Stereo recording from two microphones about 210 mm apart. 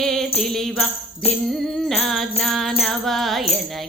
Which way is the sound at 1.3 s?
Centre (ahead or behind).